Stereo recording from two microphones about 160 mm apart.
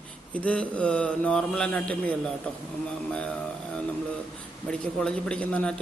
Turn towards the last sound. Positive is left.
turn(degrees=5)  # may be behind; listen again after turning